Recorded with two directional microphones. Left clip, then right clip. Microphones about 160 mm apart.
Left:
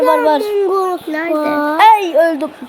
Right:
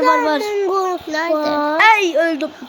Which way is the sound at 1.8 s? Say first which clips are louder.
Left 4 dB; 30° left (ahead or behind).